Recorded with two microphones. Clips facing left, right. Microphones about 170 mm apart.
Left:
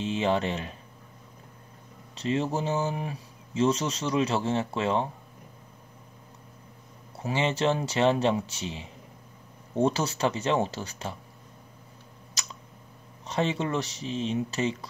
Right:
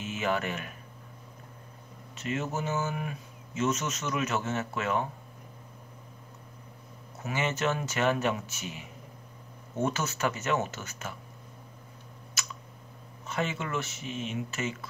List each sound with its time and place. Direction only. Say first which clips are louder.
0.0 s speech: left 5 dB; 30° left (ahead or behind)
2.1 s speech: left 5 dB; 30° left (ahead or behind)
7.2 s speech: left 4 dB; 30° left (ahead or behind)
13.3 s speech: left 5 dB; 30° left (ahead or behind)